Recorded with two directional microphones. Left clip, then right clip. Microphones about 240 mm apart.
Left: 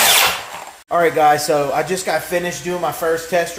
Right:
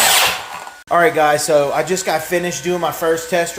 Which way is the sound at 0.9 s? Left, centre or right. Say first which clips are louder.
Right 1 dB; centre.